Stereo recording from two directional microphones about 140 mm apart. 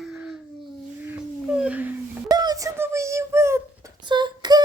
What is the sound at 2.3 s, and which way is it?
Speech, 30° right (ahead or behind).